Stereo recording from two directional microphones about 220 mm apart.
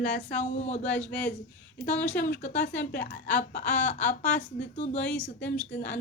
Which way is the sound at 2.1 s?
40° left (ahead or behind).